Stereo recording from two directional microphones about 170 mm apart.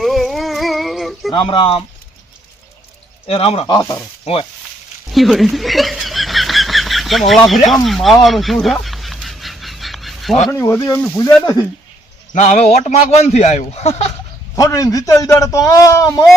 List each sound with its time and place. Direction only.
0.0 s female singing: centre (ahead or behind)
1.3 s speech: 30° left (ahead or behind)
3.2 s speech: 35° left (ahead or behind)
3.7 s a man's voice: 20° left (ahead or behind)
4.3 s speech: 40° left (ahead or behind)
5.0 s snicker: centre (ahead or behind)
7.9 s fowl: centre (ahead or behind)
10.6 s speech: 15° left (ahead or behind)
12.3 s speech: 40° left (ahead or behind)
14.5 s a man's voice: 20° left (ahead or behind)